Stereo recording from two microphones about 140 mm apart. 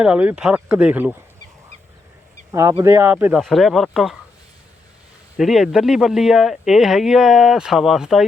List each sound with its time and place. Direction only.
0.0 s speech: 10° right (ahead or behind)
2.5 s speech: 20° right (ahead or behind)
3.4 s speech: centre (ahead or behind)
5.4 s speech: centre (ahead or behind)